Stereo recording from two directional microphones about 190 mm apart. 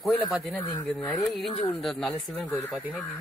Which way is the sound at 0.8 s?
5° left (ahead or behind).